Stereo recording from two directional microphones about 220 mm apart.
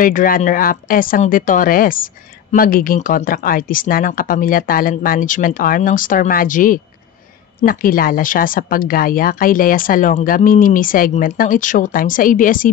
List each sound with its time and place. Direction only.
0.0 s speech: 40° left (ahead or behind)